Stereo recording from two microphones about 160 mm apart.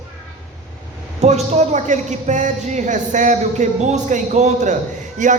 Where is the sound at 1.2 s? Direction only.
45° right (ahead or behind).